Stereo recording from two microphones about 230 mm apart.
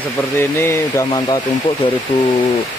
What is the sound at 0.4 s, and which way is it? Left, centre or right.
Speech, centre.